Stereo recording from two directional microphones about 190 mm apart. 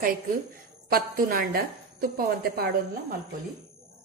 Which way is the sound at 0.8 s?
50° right (ahead or behind).